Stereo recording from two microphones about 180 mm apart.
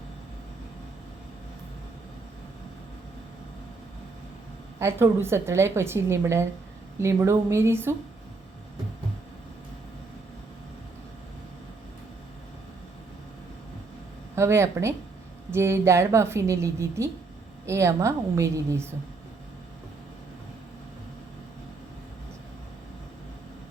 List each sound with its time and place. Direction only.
4.8 s a woman's voice: 15° right (ahead or behind)
14.3 s a woman's voice: 15° right (ahead or behind)